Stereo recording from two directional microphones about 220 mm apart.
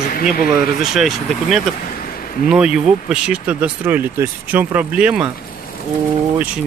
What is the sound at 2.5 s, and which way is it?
Speech, 5° right (ahead or behind).